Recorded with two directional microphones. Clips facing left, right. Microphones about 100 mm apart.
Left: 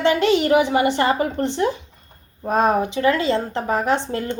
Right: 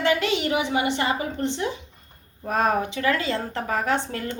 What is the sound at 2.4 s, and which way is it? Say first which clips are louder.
Speech: left 4 dB; 25° left (ahead or behind).